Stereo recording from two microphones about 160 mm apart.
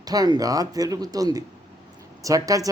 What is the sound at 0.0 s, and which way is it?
A man's voice, 25° right (ahead or behind).